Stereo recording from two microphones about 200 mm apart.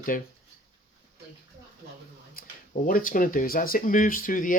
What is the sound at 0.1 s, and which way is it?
Speech, 45° left (ahead or behind).